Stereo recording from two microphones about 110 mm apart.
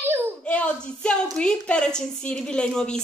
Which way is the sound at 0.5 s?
10° left (ahead or behind).